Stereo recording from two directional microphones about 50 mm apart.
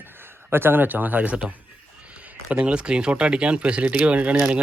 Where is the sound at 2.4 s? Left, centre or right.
Right.